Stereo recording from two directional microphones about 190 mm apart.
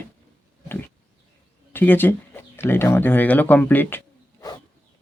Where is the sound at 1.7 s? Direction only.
10° left (ahead or behind).